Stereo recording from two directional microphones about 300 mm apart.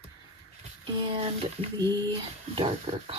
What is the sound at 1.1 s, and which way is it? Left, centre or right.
Speech, centre.